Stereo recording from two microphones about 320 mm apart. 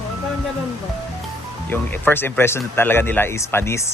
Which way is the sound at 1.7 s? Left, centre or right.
Centre.